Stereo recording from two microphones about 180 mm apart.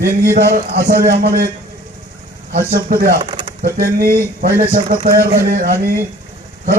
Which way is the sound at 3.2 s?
30° right (ahead or behind).